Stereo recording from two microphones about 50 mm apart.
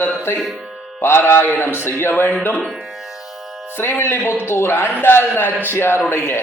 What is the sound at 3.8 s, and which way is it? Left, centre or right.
A man's voice, left.